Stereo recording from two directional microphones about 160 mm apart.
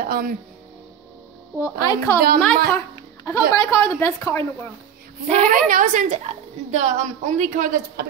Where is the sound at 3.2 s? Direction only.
15° left (ahead or behind).